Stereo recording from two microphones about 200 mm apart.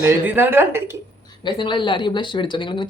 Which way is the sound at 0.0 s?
10° right (ahead or behind).